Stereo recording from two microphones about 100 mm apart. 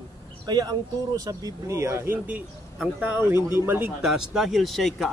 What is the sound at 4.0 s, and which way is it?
Speech, 5° right (ahead or behind).